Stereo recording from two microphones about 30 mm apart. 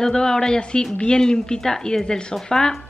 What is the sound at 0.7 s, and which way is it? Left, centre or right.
Speech, left.